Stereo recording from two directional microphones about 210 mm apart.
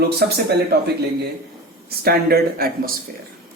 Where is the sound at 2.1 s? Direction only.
45° right (ahead or behind).